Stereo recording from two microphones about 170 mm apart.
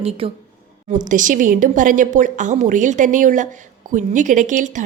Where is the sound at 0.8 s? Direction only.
50° right (ahead or behind).